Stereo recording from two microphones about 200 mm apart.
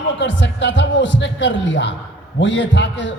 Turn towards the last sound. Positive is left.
turn(degrees=65)  # may be behind; listen again after turning